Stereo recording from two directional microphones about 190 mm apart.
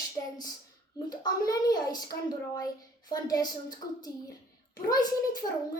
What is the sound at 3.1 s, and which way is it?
Speech, 20° left (ahead or behind).